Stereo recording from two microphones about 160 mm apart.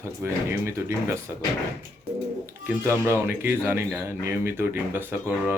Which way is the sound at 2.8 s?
15° right (ahead or behind).